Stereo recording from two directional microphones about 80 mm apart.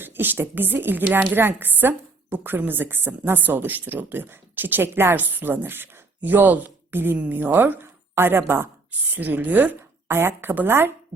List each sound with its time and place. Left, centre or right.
0.0 s speech: right
8.9 s speech: right
10.1 s speech: right